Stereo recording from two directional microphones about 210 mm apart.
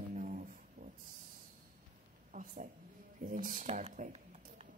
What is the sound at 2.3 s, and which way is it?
Speech, 40° right (ahead or behind).